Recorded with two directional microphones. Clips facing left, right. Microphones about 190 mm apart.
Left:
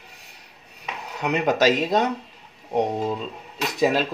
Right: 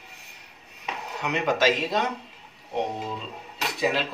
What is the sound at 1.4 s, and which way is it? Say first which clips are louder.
Speech: left 3 dB; 40° left (ahead or behind).